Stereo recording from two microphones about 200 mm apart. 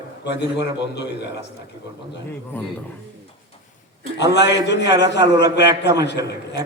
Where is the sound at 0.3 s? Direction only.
60° left (ahead or behind).